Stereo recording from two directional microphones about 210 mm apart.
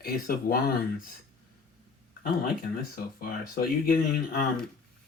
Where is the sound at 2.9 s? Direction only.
45° left (ahead or behind).